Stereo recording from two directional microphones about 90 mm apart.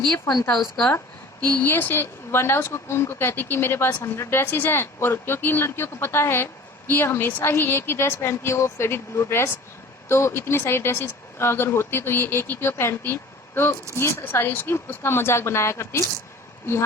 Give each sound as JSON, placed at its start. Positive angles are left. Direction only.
{"t": 0.4, "sound": "speech", "side_deg": 5}
{"t": 1.5, "sound": "speech", "side_deg": 20}